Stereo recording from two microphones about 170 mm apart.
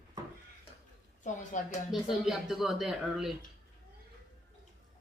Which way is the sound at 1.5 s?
45° left (ahead or behind).